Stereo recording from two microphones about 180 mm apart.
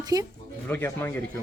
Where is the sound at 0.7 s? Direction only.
10° left (ahead or behind).